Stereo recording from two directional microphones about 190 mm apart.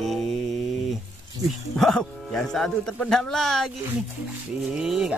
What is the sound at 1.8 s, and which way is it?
Speech, centre (ahead or behind).